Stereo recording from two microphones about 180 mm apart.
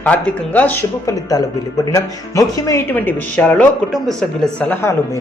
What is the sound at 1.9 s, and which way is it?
Speech, 20° left (ahead or behind).